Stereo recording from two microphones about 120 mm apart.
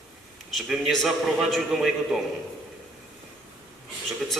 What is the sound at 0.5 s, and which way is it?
A man's voice, centre (ahead or behind).